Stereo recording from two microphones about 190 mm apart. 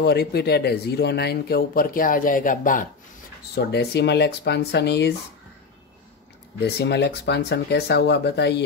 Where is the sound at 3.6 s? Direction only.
60° left (ahead or behind).